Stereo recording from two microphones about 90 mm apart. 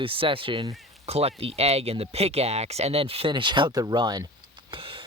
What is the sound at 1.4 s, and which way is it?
Speech, 90° right.